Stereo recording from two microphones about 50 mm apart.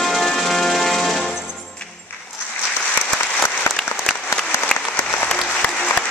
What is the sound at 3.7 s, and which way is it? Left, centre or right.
Applause, left.